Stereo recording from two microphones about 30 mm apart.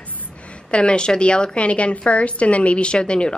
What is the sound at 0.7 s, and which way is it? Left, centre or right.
A woman's voice, left.